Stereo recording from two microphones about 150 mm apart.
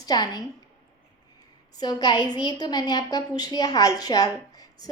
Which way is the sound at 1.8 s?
25° left (ahead or behind).